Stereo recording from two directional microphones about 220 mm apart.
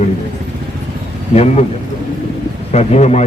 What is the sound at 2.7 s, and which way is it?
Speech, 30° left (ahead or behind).